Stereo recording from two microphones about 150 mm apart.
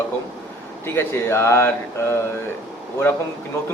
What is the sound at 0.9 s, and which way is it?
Speech, 15° left (ahead or behind).